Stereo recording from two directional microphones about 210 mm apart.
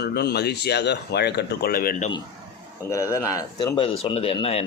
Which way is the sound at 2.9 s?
15° left (ahead or behind).